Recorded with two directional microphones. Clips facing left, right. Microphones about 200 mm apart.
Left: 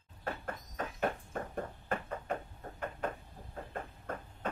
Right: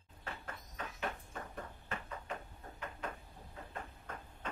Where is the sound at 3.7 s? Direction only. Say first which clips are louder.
Left 6 dB; 50° left (ahead or behind).